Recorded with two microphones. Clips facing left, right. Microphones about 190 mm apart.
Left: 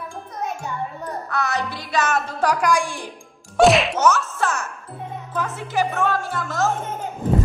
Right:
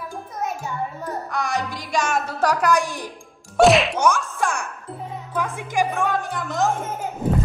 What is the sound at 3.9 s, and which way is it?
Music, 15° right (ahead or behind).